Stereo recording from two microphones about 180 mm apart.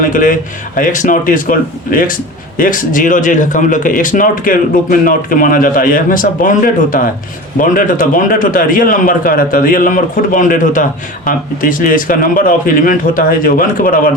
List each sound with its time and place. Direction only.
0.0 s speech: 45° left (ahead or behind)